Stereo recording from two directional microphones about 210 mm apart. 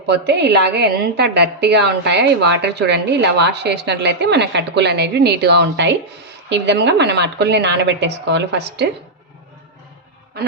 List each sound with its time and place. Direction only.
0.0 s a woman's voice: 55° right (ahead or behind)